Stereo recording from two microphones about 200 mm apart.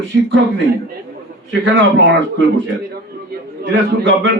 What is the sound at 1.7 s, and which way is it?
Speech, 65° right (ahead or behind).